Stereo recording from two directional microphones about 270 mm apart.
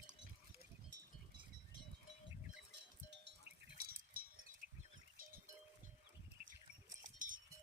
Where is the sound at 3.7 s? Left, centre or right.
Right.